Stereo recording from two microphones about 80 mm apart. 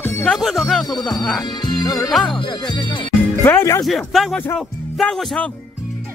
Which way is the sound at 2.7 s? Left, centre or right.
Left.